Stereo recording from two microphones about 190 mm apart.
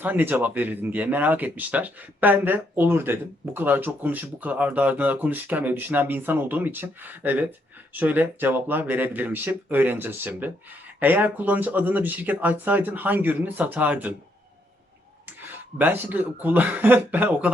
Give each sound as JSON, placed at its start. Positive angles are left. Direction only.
{"t": 0.0, "sound": "speech", "side_deg": -10}
{"t": 15.3, "sound": "speech", "side_deg": -10}